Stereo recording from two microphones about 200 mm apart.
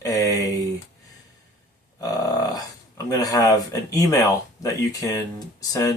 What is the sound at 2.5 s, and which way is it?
Speech, 20° left (ahead or behind).